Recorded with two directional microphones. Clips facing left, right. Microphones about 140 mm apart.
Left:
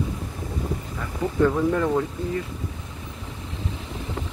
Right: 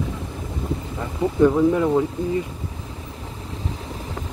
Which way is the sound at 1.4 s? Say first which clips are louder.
Right 4 dB; 15° right (ahead or behind).